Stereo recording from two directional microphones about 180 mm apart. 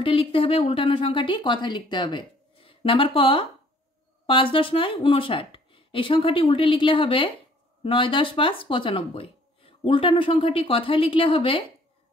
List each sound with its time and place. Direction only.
0.0 s speech: 30° left (ahead or behind)